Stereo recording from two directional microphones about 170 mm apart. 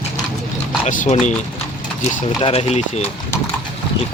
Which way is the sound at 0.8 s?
45° left (ahead or behind).